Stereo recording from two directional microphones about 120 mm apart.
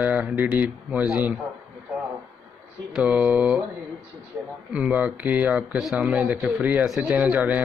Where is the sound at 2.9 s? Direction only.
10° right (ahead or behind).